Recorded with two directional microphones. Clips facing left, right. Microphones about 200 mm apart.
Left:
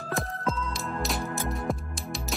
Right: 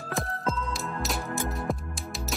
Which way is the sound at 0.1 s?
Centre (ahead or behind).